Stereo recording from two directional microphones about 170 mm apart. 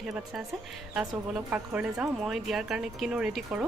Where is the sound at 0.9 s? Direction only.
10° right (ahead or behind).